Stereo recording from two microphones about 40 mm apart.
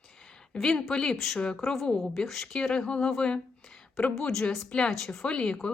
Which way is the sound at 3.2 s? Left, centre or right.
Left.